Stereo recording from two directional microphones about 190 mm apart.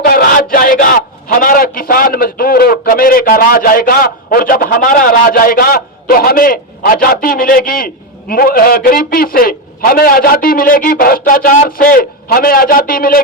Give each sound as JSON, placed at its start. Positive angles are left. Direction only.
{"t": 0.0, "sound": "a man's voice", "side_deg": 50}